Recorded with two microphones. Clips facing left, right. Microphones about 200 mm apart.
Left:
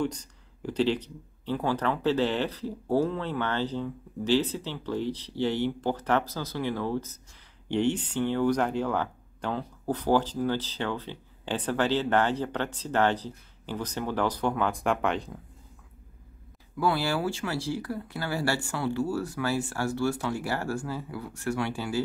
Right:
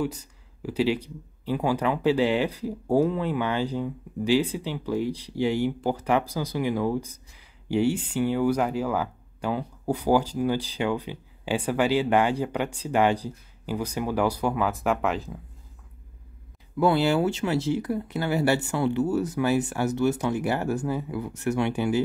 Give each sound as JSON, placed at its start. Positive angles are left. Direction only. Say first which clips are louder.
{"t": 0.0, "sound": "speech", "louder": "right 1 dB", "side_deg": -5}
{"t": 16.8, "sound": "speech", "louder": "right 6 dB", "side_deg": -20}